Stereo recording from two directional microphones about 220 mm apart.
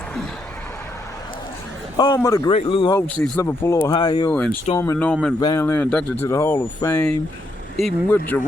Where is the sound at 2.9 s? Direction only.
5° left (ahead or behind).